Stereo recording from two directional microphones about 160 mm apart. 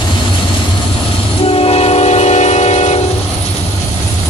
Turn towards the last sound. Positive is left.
turn(degrees=45)  # may be behind; listen again after turning